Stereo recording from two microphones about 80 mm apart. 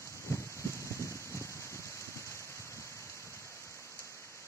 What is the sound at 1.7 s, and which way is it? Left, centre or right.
Rain, left.